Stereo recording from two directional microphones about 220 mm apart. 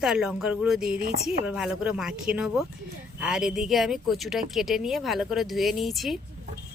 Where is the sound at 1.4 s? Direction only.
5° right (ahead or behind).